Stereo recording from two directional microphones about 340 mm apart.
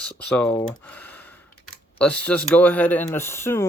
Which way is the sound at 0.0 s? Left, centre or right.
Centre.